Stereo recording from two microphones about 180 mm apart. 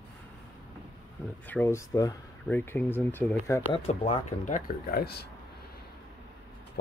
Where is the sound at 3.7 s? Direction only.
35° left (ahead or behind); by 5.2 s 60° left (ahead or behind).